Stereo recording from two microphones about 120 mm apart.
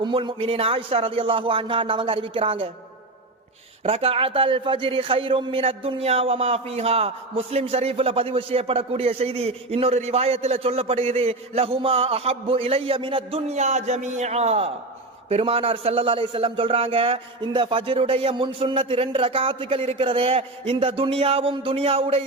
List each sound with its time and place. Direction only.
0.0 s speech: 40° right (ahead or behind)
3.8 s a man's voice: 55° right (ahead or behind)